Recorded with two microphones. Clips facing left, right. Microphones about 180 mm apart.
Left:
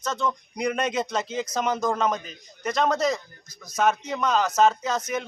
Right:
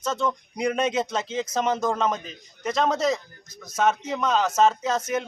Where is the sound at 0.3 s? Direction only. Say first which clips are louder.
Right 1 dB; 5° right (ahead or behind).